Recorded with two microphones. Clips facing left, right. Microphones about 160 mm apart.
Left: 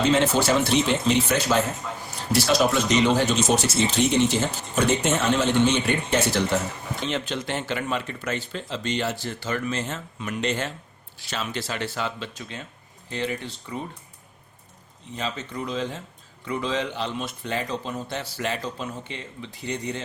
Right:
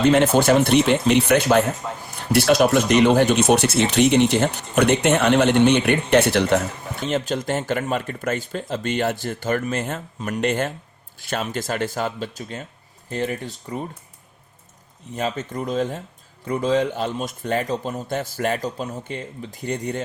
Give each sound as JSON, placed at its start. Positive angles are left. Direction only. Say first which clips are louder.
{"t": 0.1, "sound": "speech", "louder": "right 5 dB", "side_deg": -55}
{"t": 7.0, "sound": "speech", "louder": "right 5 dB", "side_deg": -45}
{"t": 15.1, "sound": "speech", "louder": "right 5 dB", "side_deg": -50}